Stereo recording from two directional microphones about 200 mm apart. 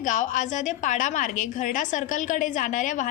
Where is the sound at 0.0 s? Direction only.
40° left (ahead or behind).